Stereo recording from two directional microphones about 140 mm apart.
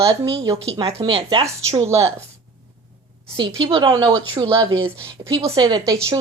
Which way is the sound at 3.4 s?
35° right (ahead or behind).